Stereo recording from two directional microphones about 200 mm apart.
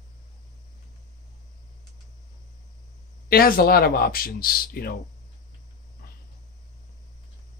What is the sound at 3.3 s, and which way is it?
Speech, 45° left (ahead or behind).